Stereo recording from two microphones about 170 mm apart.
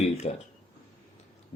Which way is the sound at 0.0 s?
40° left (ahead or behind).